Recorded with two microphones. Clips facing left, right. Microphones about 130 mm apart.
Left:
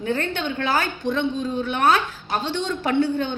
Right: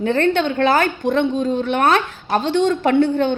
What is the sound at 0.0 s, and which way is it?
A woman's voice, 60° right (ahead or behind).